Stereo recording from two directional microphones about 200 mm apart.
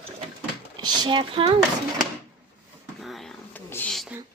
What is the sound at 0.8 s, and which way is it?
Speech, 20° right (ahead or behind).